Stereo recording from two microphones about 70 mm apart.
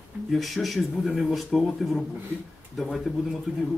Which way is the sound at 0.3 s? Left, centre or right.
Centre.